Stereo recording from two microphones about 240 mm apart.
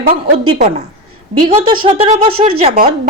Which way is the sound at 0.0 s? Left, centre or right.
Right.